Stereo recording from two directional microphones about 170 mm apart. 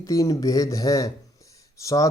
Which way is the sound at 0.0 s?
20° left (ahead or behind).